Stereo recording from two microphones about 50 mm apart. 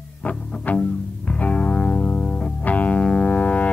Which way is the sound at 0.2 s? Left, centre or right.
Left.